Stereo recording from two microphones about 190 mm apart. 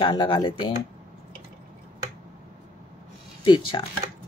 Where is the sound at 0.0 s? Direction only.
25° left (ahead or behind).